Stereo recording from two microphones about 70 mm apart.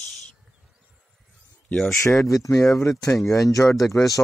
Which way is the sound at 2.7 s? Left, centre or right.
Left.